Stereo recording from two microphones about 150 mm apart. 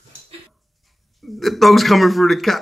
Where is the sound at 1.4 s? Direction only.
Centre (ahead or behind).